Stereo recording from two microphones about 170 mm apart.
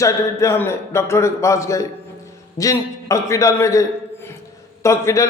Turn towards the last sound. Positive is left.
turn(degrees=15)  # may be behind; listen again after turning